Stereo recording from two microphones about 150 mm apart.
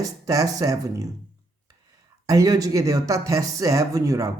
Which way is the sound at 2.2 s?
25° right (ahead or behind).